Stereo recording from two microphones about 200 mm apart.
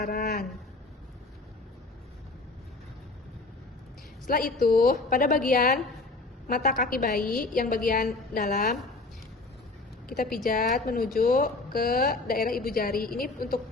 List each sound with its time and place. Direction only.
0.0 s speech: 45° left (ahead or behind)
4.3 s speech: 45° left (ahead or behind)
10.1 s speech: 45° left (ahead or behind)